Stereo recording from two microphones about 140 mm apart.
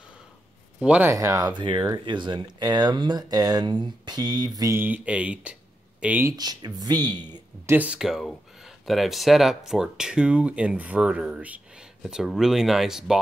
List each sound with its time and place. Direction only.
0.8 s speech: 10° right (ahead or behind)
1.1 s speech: 20° right (ahead or behind)
1.5 s speech: 35° right (ahead or behind); by 6.3 s 10° right (ahead or behind)
6.3 s speech: 30° right (ahead or behind)
7.7 s speech: 10° right (ahead or behind)